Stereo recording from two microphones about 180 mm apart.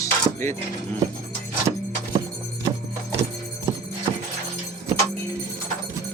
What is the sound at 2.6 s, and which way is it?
Music, 15° right (ahead or behind).